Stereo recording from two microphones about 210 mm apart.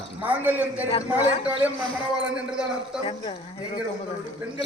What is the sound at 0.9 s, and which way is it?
Speech, 30° left (ahead or behind).